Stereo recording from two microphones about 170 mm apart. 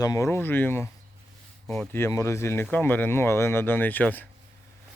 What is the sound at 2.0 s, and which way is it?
Speech, 15° left (ahead or behind).